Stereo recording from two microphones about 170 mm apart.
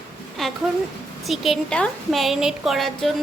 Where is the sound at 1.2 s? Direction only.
Centre (ahead or behind).